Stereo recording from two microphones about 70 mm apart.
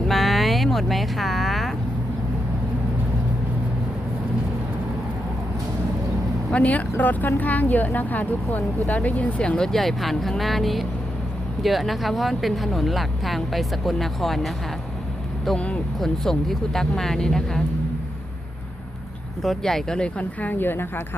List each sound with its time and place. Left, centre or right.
0.1 s vehicle: centre
6.5 s speech: centre
15.5 s speech: centre
19.4 s speech: centre; by 21.0 s left